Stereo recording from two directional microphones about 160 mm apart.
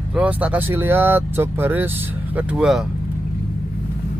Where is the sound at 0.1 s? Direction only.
10° right (ahead or behind).